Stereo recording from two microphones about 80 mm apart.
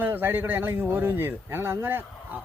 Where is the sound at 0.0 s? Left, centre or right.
Right.